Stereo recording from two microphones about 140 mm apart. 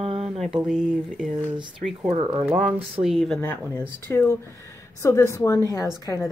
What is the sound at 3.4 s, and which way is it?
Speech, 15° left (ahead or behind).